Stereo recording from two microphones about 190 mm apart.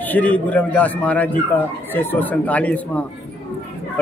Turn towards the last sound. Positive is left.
turn(degrees=5)  # may be behind; listen again after turning